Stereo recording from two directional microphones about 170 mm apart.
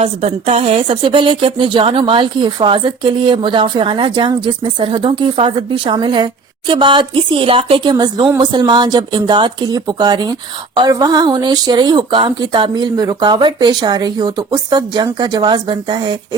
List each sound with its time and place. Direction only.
0.0 s speech: 35° right (ahead or behind)